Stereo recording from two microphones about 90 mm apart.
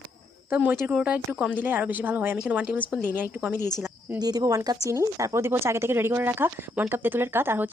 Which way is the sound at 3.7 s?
30° right (ahead or behind).